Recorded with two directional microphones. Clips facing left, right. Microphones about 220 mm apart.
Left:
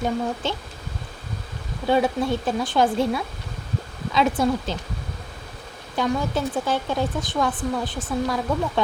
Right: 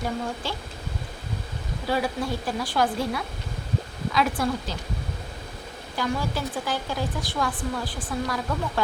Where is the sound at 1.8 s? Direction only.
25° left (ahead or behind).